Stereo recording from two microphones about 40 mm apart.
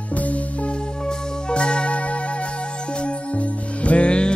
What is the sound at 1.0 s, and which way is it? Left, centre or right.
Music, left.